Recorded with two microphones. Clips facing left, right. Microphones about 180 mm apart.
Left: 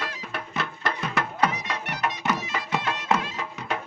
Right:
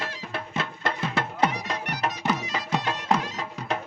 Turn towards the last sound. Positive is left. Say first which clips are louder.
# right 1 dB
turn(degrees=-35)  # may be behind; listen again after turning